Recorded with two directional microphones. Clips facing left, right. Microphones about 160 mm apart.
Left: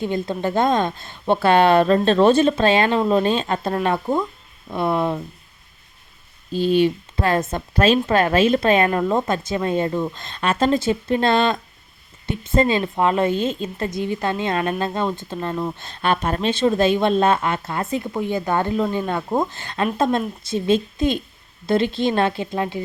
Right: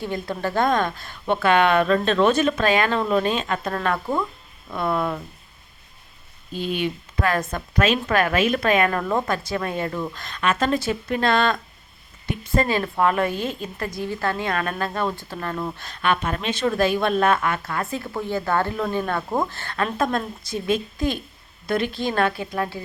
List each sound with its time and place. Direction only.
0.0 s a woman's voice: 20° left (ahead or behind)
6.5 s a woman's voice: 30° left (ahead or behind)
15.9 s a woman's voice: 35° left (ahead or behind)